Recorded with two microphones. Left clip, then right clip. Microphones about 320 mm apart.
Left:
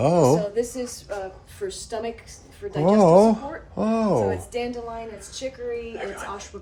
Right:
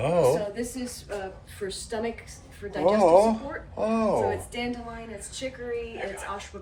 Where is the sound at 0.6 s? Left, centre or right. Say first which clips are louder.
Left 8 dB; left.